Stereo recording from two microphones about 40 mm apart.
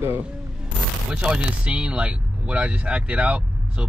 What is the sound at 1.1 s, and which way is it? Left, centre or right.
Speech, right.